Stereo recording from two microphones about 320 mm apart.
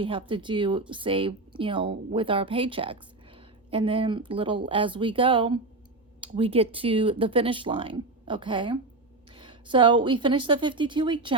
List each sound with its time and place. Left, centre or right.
0.0 s speech: centre